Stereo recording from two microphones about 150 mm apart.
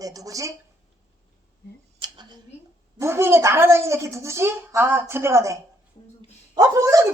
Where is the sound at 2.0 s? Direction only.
30° right (ahead or behind).